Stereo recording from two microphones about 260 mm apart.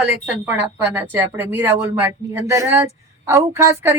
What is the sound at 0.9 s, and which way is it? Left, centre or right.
Speech, centre.